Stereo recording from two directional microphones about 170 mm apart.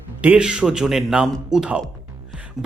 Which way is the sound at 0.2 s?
5° right (ahead or behind).